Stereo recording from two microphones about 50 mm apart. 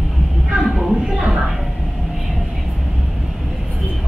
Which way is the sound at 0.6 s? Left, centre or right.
Centre.